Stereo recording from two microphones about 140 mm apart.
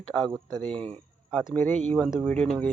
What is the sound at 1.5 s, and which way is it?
Speech, 15° left (ahead or behind).